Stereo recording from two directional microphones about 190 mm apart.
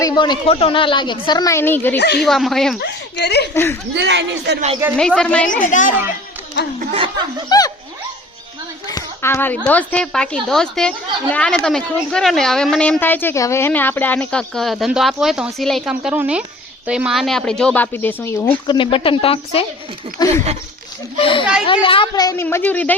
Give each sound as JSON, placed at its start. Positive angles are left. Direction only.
{"t": 0.0, "sound": "a woman's voice", "side_deg": 25}
{"t": 2.0, "sound": "speech", "side_deg": 60}
{"t": 2.2, "sound": "a woman's voice", "side_deg": 0}
{"t": 2.8, "sound": "a sound", "side_deg": 60}
{"t": 3.5, "sound": "speech", "side_deg": 10}
{"t": 3.9, "sound": "speech", "side_deg": -70}
{"t": 4.9, "sound": "a woman's voice", "side_deg": 5}
{"t": 5.6, "sound": "a woman's voice", "side_deg": 45}
{"t": 6.9, "sound": "speech", "side_deg": -25}
{"t": 8.9, "sound": "a woman's voice", "side_deg": 15}